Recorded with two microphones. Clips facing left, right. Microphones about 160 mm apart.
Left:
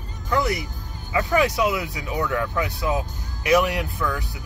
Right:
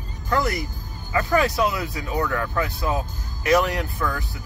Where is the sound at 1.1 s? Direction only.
15° left (ahead or behind).